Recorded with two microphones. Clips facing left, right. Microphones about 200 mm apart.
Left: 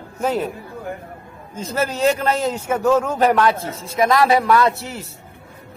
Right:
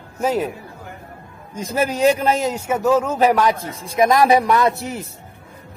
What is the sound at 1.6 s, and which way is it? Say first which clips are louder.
A man's voice: right 2 dB; 15° right (ahead or behind).